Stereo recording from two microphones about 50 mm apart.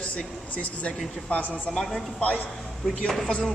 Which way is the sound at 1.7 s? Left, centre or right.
Centre.